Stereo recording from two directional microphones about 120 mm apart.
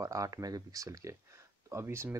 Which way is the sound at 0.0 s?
30° right (ahead or behind).